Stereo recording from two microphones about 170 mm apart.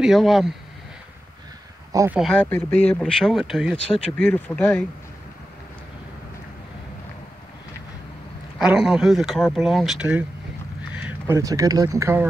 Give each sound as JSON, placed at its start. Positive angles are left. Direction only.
{"t": 0.0, "sound": "speech", "side_deg": 0}
{"t": 1.9, "sound": "speech", "side_deg": -20}
{"t": 2.1, "sound": "speech", "side_deg": 0}
{"t": 8.5, "sound": "speech", "side_deg": -5}